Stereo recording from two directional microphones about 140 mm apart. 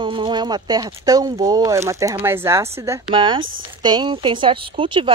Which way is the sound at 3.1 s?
35° right (ahead or behind).